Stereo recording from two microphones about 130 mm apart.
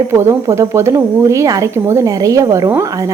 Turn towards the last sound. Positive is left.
turn(degrees=-25)  # may be behind; listen again after turning